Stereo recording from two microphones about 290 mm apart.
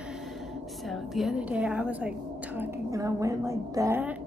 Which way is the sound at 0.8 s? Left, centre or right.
Centre.